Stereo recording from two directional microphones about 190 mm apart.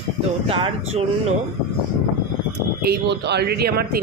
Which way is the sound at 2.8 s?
60° right (ahead or behind).